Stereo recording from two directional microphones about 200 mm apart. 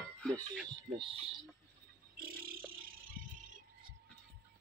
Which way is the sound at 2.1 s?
50° right (ahead or behind).